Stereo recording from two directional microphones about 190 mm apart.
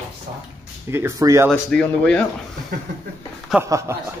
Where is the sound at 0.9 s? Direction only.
15° right (ahead or behind).